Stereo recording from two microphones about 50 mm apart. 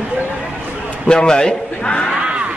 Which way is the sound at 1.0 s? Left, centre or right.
Centre.